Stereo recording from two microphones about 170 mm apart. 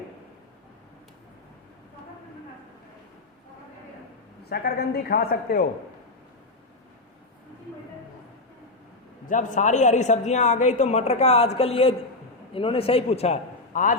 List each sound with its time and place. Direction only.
4.4 s a woman's voice: 65° left (ahead or behind)
9.2 s a woman's voice: 50° left (ahead or behind)